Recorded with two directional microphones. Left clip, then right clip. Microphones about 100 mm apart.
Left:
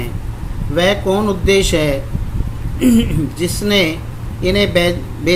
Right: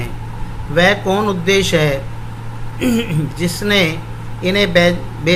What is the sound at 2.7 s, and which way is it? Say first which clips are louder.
Speech: left 3 dB; 90° left.